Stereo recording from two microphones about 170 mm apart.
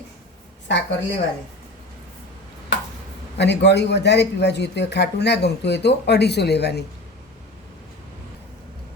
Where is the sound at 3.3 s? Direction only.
90° left.